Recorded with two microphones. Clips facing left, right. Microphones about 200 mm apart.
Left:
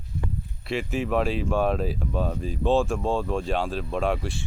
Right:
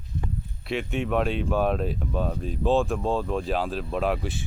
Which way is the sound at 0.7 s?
Centre (ahead or behind).